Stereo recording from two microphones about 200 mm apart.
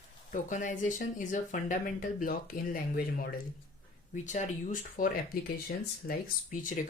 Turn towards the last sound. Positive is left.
turn(degrees=40)  # may be behind; listen again after turning